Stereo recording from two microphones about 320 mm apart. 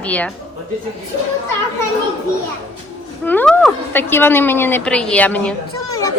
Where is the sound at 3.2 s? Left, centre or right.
Centre.